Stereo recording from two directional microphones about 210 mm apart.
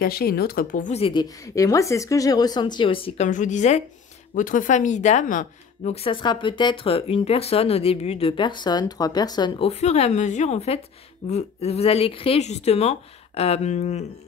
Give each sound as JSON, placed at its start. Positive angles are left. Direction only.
{"t": 0.0, "sound": "speech", "side_deg": 45}
{"t": 1.5, "sound": "a woman's voice", "side_deg": 15}